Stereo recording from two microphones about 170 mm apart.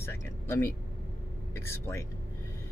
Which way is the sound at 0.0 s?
15° left (ahead or behind).